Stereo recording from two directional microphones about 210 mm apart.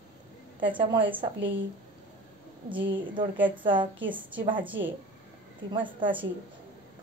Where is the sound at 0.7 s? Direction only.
25° right (ahead or behind).